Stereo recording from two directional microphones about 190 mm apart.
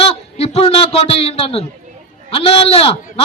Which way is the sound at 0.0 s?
30° left (ahead or behind).